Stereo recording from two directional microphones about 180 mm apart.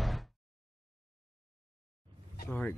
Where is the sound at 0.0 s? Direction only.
Centre (ahead or behind).